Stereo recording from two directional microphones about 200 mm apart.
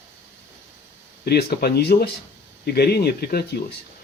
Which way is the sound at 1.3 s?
50° left (ahead or behind).